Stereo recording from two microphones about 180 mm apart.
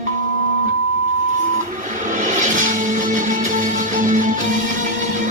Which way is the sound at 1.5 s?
45° right (ahead or behind).